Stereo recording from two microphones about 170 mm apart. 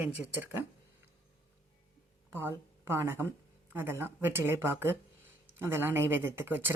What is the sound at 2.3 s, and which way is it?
Speech, 15° right (ahead or behind).